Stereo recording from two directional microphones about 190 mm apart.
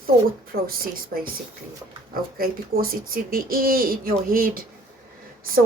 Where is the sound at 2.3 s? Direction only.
50° right (ahead or behind).